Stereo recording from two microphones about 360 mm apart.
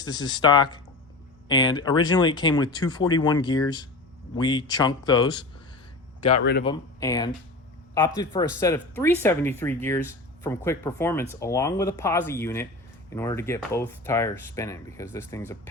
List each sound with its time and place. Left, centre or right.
0.0 s speech: centre
6.4 s a man's voice: left
6.7 s speech: centre